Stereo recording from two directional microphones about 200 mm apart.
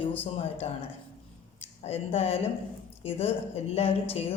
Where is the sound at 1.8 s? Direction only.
30° left (ahead or behind).